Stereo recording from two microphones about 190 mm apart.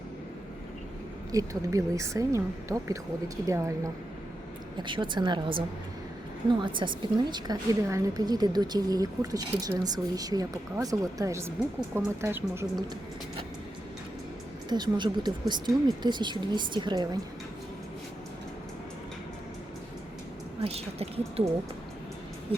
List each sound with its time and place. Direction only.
1.3 s a woman's voice: 15° right (ahead or behind)
14.7 s a woman's voice: 25° right (ahead or behind)
20.6 s a woman's voice: 30° right (ahead or behind)